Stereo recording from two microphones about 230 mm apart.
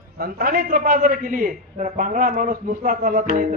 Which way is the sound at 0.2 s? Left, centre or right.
Right.